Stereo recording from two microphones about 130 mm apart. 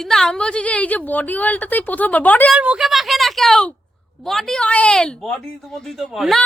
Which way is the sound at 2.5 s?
5° right (ahead or behind).